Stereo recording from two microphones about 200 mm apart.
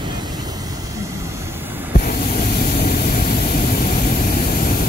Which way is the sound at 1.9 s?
45° left (ahead or behind).